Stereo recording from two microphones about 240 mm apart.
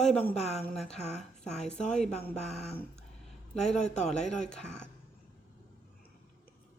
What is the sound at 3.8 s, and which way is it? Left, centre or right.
Speech, left.